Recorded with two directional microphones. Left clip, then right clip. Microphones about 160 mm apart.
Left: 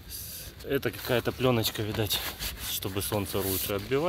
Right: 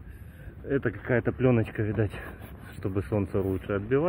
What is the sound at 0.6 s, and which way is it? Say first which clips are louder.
Speech: right 1 dB; 10° left (ahead or behind).